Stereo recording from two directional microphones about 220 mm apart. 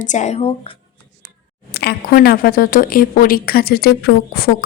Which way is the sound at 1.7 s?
45° left (ahead or behind).